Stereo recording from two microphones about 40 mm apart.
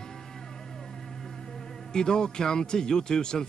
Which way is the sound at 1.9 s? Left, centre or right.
Centre.